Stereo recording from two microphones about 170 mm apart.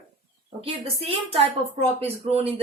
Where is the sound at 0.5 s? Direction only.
35° right (ahead or behind).